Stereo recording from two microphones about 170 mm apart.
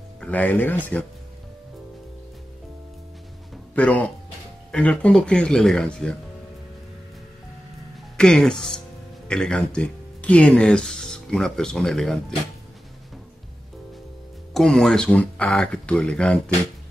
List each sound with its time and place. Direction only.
0.2 s speech: 10° left (ahead or behind)
3.7 s speech: 10° left (ahead or behind)
8.2 s speech: 5° left (ahead or behind)
14.5 s speech: centre (ahead or behind)